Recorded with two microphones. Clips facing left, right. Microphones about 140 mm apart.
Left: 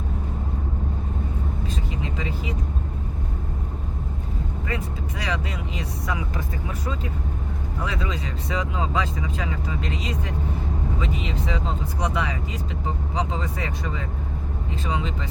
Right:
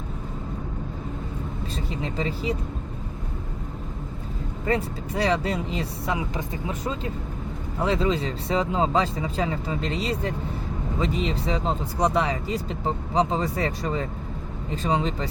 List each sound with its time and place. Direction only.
2.1 s speech: 35° right (ahead or behind)
4.6 s speech: 35° right (ahead or behind)